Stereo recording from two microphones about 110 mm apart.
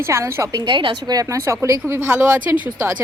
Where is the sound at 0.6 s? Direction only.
45° right (ahead or behind).